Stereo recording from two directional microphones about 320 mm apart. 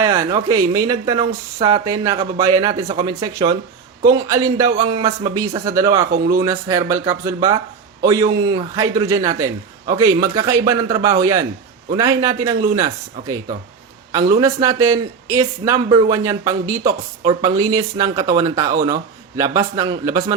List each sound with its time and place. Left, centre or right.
0.0 s a man's voice: centre
6.1 s a man's voice: right
6.4 s a man's voice: centre
14.1 s a man's voice: centre